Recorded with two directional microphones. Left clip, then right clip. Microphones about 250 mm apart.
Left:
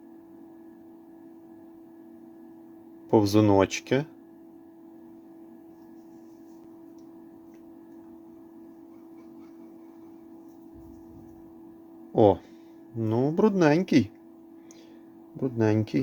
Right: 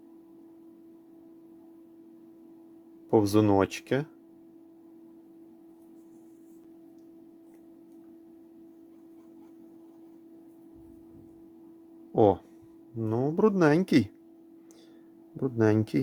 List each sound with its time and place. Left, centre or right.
3.1 s speech: centre
12.1 s speech: centre
15.4 s speech: centre